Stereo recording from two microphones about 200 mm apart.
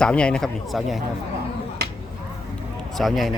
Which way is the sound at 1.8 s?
55° right (ahead or behind).